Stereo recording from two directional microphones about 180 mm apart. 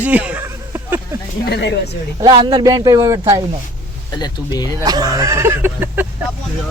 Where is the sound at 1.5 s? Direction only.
70° left (ahead or behind).